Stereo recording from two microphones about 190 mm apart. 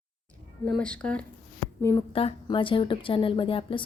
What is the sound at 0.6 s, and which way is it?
A woman's voice, 5° left (ahead or behind).